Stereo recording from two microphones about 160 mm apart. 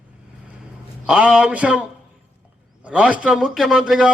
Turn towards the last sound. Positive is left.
turn(degrees=-5)  # may be behind; listen again after turning